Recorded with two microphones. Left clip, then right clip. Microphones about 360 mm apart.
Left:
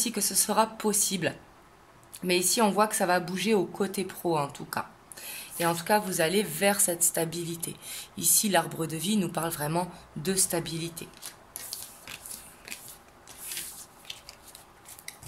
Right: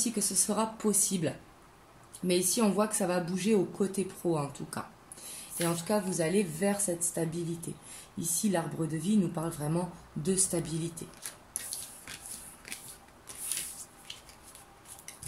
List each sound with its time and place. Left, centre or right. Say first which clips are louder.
0.0 s speech: left 3 dB; left
4.7 s a sound: left 7 dB; left
6.0 s speech: left 3 dB; left
9.1 s speech: left 2 dB; left
10.2 s speech: left 3 dB; left
12.7 s a sound: left 2 dB; centre